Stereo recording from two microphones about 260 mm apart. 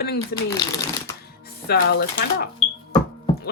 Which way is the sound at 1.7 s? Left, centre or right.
Left.